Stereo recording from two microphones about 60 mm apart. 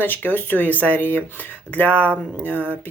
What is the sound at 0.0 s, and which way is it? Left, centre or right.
Speech, left.